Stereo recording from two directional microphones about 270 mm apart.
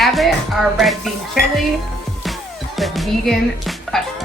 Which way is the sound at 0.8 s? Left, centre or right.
Centre.